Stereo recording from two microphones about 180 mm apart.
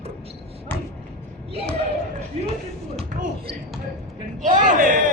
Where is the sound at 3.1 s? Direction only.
45° right (ahead or behind).